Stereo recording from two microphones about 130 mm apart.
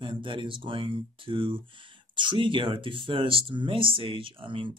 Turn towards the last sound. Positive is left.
turn(degrees=-40)  # may be behind; listen again after turning